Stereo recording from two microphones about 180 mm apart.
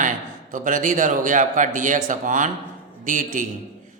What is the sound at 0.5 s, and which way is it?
A man's voice, 45° right (ahead or behind).